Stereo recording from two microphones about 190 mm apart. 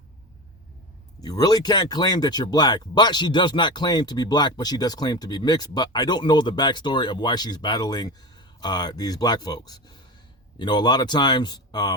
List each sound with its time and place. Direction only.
1.2 s speech: 20° left (ahead or behind)